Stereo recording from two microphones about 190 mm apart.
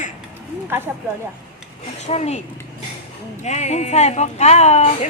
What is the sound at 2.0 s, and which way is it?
Speech, 35° left (ahead or behind).